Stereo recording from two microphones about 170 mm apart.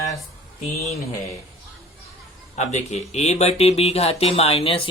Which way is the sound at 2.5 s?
40° left (ahead or behind).